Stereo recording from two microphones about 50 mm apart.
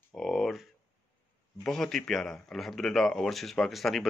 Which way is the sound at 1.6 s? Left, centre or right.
Centre.